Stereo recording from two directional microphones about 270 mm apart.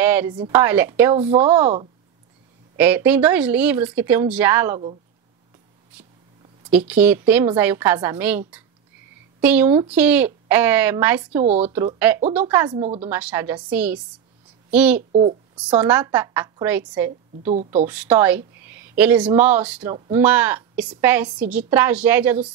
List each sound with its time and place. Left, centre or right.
0.0 s a sound: centre
0.4 s speech: centre
2.8 s speech: centre
6.7 s speech: centre
13.0 s a child's voice: centre